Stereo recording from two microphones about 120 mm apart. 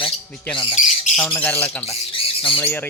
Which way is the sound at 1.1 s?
10° left (ahead or behind).